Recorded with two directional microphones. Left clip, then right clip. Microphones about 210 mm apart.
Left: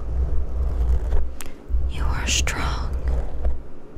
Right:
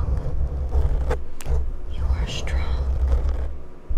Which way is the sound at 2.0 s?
30° left (ahead or behind).